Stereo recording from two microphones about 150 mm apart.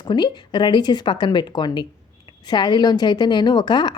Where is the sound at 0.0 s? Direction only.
30° left (ahead or behind).